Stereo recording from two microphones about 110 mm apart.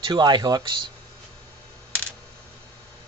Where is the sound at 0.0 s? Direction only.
40° right (ahead or behind).